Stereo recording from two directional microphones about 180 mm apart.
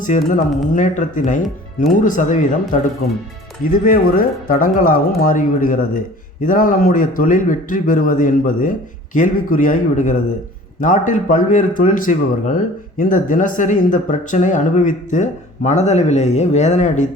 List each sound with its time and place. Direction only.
0.0 s speech: 45° left (ahead or behind)
3.7 s speech: 50° left (ahead or behind)